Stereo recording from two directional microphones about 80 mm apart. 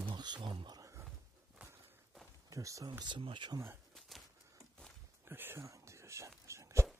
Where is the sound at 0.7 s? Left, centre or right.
Right.